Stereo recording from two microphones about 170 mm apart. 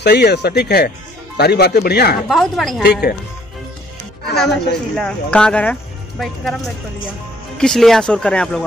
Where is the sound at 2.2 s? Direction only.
Centre (ahead or behind).